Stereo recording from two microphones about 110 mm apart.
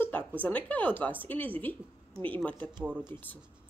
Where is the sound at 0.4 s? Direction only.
15° left (ahead or behind).